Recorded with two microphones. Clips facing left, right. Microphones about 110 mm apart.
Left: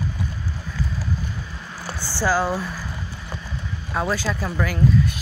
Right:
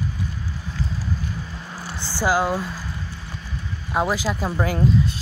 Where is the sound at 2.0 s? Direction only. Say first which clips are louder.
Right 1 dB; 20° right (ahead or behind).